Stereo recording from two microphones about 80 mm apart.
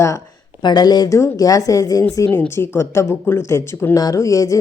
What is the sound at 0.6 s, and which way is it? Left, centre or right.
Speech, left.